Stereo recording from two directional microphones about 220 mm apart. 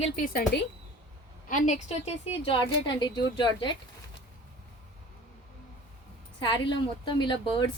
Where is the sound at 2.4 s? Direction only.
25° left (ahead or behind).